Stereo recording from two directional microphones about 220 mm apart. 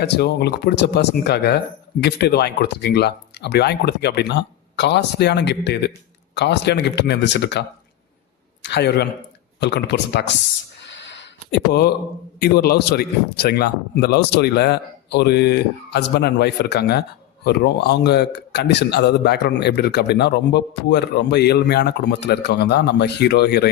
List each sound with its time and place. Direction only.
0.0 s speech: 50° left (ahead or behind)
8.6 s speech: 50° left (ahead or behind)
11.2 s a sound: 50° left (ahead or behind)
12.4 s speech: 45° left (ahead or behind)